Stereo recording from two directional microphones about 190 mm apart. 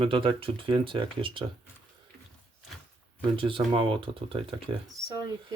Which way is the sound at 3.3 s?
30° right (ahead or behind).